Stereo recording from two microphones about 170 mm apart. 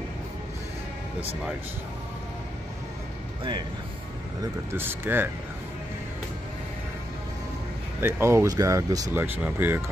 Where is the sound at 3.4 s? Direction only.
25° right (ahead or behind).